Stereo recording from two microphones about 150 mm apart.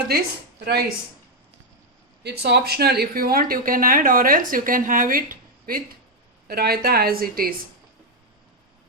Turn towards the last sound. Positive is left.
turn(degrees=-80)